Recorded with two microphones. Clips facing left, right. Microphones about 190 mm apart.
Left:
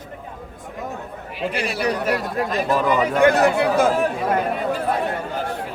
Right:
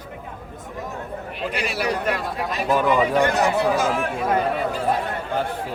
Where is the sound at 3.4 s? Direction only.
55° left (ahead or behind).